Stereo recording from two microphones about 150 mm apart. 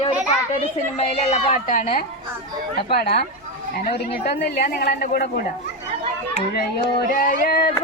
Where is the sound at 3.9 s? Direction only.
90° left.